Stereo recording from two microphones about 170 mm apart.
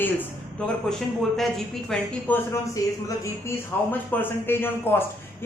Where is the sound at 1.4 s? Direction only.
Centre (ahead or behind).